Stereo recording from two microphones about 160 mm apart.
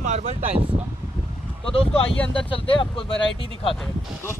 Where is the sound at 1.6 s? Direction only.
35° left (ahead or behind).